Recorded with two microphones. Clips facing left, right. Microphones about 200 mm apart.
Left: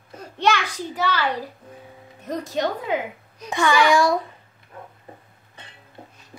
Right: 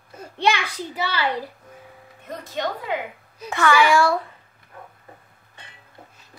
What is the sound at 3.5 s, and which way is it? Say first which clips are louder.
Speech: even; 15° left (ahead or behind).